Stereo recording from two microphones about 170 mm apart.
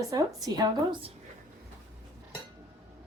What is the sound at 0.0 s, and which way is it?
A woman's voice, 20° right (ahead or behind).